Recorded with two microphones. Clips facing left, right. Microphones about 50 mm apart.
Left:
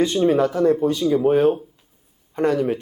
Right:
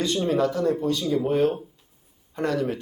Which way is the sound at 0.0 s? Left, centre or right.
Left.